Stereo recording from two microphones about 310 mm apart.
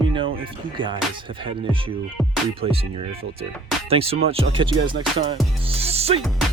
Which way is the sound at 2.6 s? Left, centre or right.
Centre.